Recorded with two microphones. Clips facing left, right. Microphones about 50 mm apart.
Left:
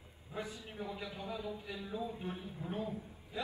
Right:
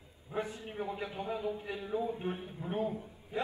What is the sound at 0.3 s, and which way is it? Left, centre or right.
A man's voice, right.